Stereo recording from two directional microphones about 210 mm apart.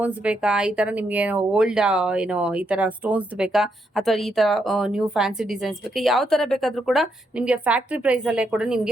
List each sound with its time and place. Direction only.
0.0 s speech: 5° right (ahead or behind)